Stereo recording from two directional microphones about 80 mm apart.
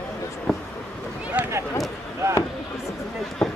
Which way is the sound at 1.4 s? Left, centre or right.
Centre.